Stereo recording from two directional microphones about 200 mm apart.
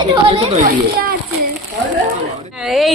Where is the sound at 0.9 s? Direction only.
50° right (ahead or behind).